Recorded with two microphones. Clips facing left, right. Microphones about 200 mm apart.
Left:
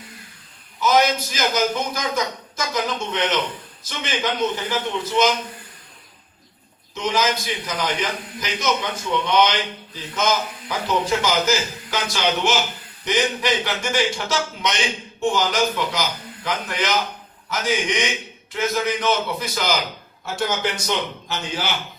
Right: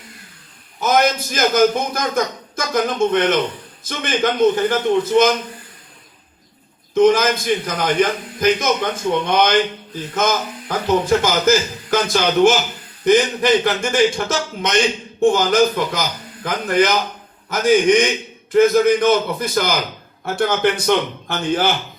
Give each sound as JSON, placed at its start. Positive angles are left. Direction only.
{"t": 0.8, "sound": "a man's voice", "side_deg": -50}
{"t": 6.9, "sound": "a man's voice", "side_deg": -50}